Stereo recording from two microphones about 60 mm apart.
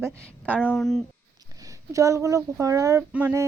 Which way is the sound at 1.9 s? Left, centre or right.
Right.